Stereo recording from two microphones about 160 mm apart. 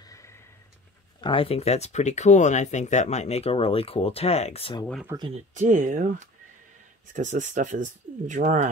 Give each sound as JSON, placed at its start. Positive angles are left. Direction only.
{"t": 1.2, "sound": "speech", "side_deg": 35}
{"t": 5.3, "sound": "speech", "side_deg": -50}